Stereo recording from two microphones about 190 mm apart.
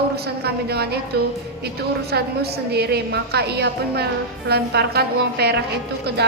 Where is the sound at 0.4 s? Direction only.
60° right (ahead or behind).